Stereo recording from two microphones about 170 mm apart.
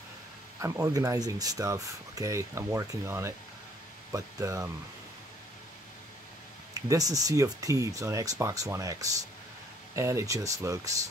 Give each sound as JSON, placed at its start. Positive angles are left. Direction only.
{"t": 0.6, "sound": "speech", "side_deg": -20}
{"t": 6.7, "sound": "speech", "side_deg": -20}